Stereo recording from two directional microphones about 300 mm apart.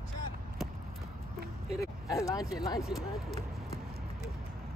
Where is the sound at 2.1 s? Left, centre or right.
Centre.